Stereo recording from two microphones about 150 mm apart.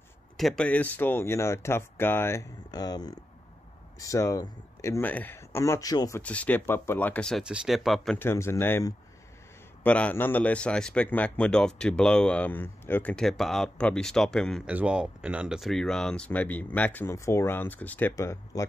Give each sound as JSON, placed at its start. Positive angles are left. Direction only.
{"t": 0.4, "sound": "a man's voice", "side_deg": 5}
{"t": 6.2, "sound": "a man's voice", "side_deg": 10}
{"t": 8.2, "sound": "a man's voice", "side_deg": 15}
{"t": 14.7, "sound": "a man's voice", "side_deg": -10}